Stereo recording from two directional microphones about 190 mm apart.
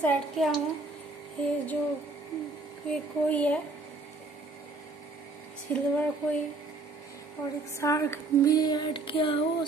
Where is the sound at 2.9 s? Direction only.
5° left (ahead or behind).